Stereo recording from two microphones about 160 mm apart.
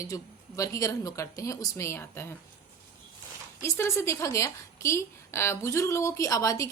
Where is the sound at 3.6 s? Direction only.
15° left (ahead or behind).